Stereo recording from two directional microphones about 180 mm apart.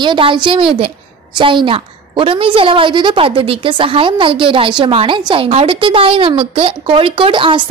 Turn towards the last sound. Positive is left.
turn(degrees=-30)  # may be behind; listen again after turning